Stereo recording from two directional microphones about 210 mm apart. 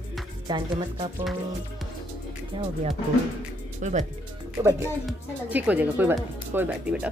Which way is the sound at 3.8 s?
35° right (ahead or behind).